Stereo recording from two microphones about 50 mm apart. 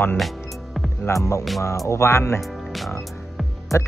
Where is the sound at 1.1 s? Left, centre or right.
Left.